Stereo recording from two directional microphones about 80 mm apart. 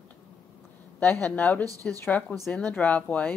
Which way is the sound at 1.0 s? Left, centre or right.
Left.